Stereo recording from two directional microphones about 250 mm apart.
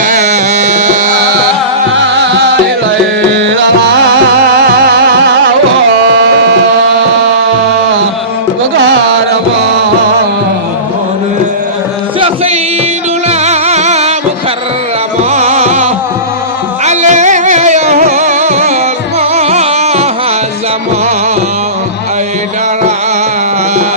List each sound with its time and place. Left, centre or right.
0.0 s music: right
2.0 s music: right
13.2 s music: right
15.2 s music: right